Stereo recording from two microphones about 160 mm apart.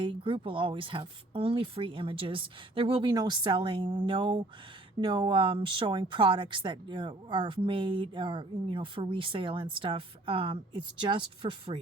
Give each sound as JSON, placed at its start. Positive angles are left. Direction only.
{"t": 0.0, "sound": "speech", "side_deg": -35}